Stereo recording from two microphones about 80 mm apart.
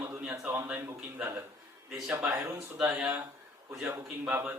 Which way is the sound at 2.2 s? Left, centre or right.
Centre.